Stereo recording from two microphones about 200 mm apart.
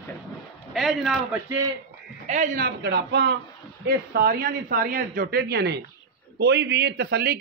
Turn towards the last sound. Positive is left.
turn(degrees=-50)  # may be behind; listen again after turning